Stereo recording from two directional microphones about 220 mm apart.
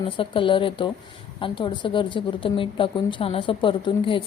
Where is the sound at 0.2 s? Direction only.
20° left (ahead or behind).